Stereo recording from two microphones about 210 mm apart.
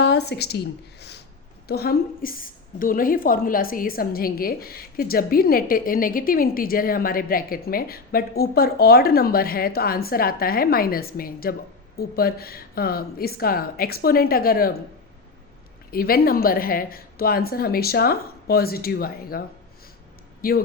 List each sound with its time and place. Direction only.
0.0 s a woman's voice: 50° left (ahead or behind)
15.9 s a woman's voice: 45° left (ahead or behind)
20.4 s a woman's voice: 45° left (ahead or behind)